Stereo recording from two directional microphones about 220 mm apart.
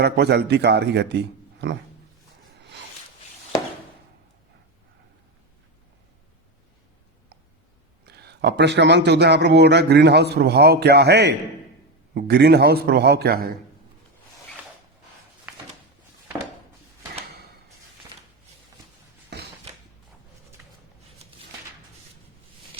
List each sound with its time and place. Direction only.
0.0 s a man's voice: 50° right (ahead or behind)
8.0 s a man's voice: 50° right (ahead or behind)